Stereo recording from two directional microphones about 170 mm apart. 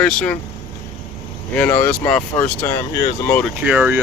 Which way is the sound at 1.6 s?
15° left (ahead or behind).